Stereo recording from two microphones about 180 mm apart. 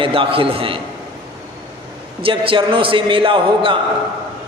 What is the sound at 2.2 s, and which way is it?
A man's voice, 30° right (ahead or behind).